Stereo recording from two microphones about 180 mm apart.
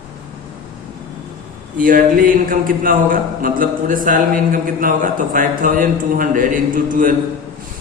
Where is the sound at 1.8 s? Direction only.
50° right (ahead or behind).